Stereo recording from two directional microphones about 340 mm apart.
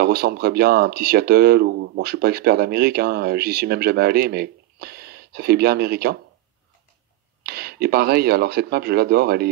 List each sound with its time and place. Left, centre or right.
0.0 s speech: right
7.4 s speech: right